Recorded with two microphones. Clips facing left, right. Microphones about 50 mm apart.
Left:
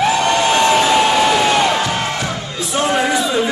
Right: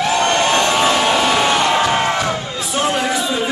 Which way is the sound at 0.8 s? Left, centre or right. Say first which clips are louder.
Left 2 dB; centre.